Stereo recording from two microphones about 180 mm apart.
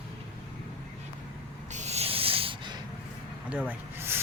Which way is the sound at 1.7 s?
40° right (ahead or behind).